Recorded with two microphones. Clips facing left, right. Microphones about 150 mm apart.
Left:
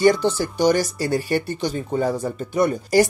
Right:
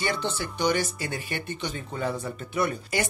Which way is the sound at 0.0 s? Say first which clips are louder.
Left 12 dB; 40° left (ahead or behind).